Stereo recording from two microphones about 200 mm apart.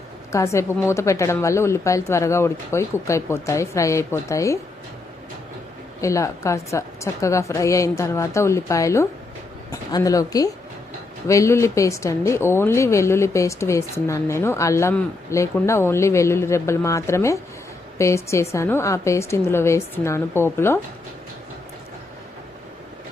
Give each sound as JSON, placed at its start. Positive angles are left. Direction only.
{"t": 0.3, "sound": "speech", "side_deg": 15}
{"t": 6.0, "sound": "speech", "side_deg": 15}